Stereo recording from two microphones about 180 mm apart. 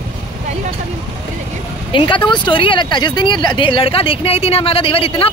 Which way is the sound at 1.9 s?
30° left (ahead or behind).